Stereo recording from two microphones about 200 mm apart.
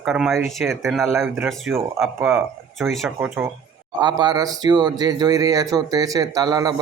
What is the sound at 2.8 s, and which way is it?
Speech, centre (ahead or behind).